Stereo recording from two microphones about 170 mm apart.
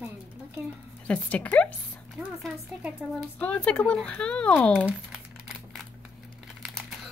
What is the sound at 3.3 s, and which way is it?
Speech, 10° left (ahead or behind).